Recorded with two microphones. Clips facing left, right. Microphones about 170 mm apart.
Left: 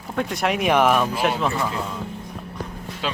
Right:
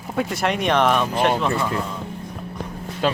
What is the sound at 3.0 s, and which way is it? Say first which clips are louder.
Speech: right 7 dB; 45° right (ahead or behind).